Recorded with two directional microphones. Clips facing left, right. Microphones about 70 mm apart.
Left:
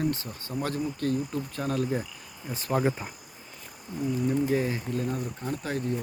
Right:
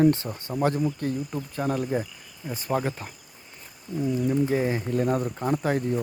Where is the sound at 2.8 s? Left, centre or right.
Centre.